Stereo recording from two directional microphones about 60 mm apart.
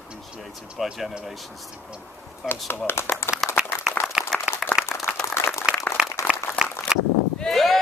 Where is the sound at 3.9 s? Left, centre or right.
Left.